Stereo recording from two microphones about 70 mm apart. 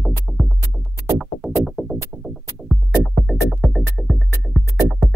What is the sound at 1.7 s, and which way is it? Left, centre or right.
Music, centre.